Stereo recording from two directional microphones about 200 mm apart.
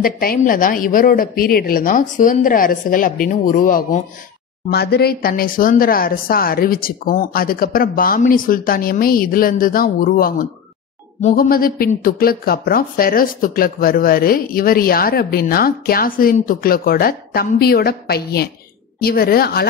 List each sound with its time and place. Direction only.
0.0 s speech: 45° left (ahead or behind)